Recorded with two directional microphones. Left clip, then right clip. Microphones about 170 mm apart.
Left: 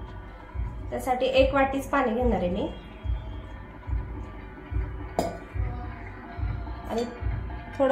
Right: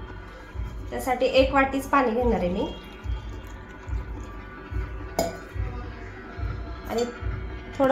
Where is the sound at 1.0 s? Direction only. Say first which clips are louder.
Right 1 dB; 20° right (ahead or behind).